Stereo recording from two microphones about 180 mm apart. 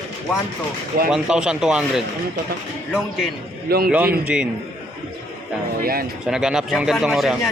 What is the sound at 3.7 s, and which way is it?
Speech, 55° right (ahead or behind).